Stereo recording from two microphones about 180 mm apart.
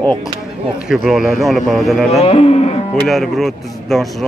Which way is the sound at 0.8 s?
Centre (ahead or behind).